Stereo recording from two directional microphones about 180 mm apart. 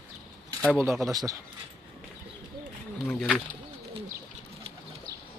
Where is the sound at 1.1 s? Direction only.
20° right (ahead or behind).